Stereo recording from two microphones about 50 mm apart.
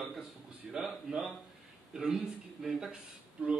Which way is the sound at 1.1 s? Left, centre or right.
Centre.